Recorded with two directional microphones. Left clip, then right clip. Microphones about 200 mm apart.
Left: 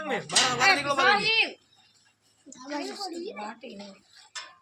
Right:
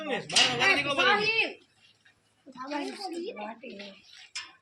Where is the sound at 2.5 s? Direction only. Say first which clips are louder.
Even; 20° right (ahead or behind).